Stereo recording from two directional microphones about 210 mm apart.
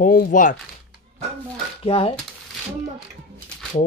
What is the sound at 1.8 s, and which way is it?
Speech, 25° left (ahead or behind).